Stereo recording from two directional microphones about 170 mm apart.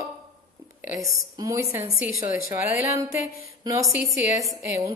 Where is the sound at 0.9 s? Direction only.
20° right (ahead or behind).